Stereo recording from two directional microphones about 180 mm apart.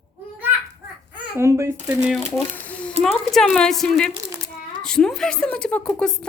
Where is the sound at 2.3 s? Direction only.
5° left (ahead or behind).